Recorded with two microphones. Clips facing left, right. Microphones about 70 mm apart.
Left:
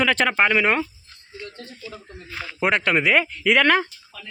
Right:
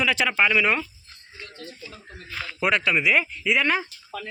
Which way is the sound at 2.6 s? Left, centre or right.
Left.